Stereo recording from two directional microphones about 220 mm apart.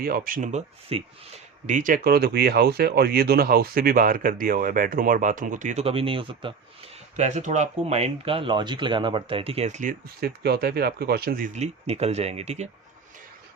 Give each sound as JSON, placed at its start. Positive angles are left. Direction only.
{"t": 0.0, "sound": "speech", "side_deg": -40}